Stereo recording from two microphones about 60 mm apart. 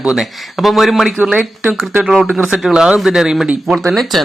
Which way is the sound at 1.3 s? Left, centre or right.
Right.